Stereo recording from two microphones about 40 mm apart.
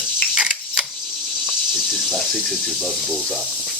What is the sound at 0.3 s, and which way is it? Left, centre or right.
Coin, centre.